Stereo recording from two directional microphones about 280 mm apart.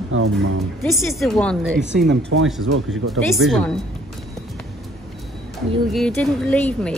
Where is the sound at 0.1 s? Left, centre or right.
Right.